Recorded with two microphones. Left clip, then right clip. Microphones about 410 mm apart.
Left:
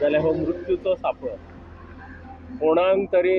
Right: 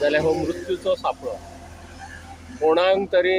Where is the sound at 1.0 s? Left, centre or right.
Left.